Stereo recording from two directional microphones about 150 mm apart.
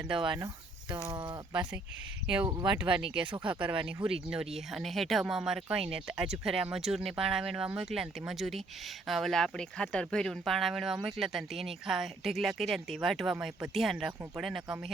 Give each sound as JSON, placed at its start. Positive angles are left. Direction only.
{"t": 0.3, "sound": "cricket", "side_deg": -25}
{"t": 1.0, "sound": "speech", "side_deg": -30}
{"t": 2.2, "sound": "speech", "side_deg": -5}
{"t": 2.5, "sound": "speech", "side_deg": -25}
{"t": 2.7, "sound": "speech", "side_deg": -5}